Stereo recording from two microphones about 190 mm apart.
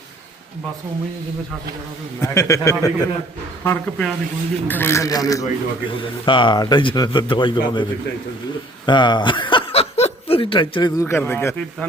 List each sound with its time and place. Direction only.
2.2 s a man's voice: 15° left (ahead or behind)
8.9 s chuckle: 25° left (ahead or behind)
11.0 s a man's voice: 10° left (ahead or behind)